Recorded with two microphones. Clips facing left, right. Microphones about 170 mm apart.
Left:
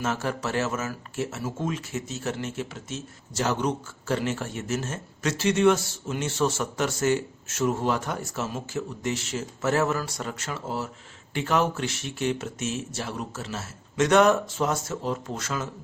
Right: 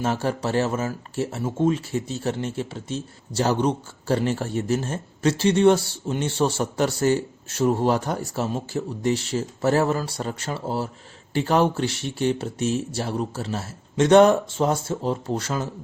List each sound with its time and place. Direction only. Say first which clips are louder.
0.0 s speech: right 4 dB; 30° right (ahead or behind)